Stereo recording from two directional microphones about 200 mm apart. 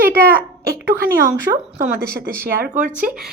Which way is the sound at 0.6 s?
50° right (ahead or behind).